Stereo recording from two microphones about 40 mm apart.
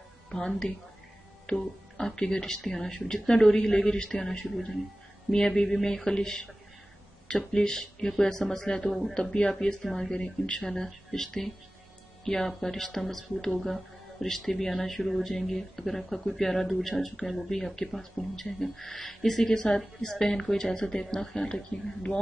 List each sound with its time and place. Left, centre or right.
0.3 s speech: centre